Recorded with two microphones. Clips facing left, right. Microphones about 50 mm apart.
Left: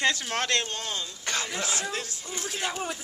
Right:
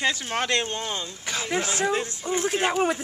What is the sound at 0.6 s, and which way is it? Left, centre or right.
Speech, right.